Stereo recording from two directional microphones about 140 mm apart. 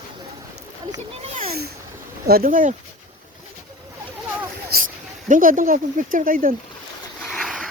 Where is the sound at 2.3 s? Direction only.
80° right.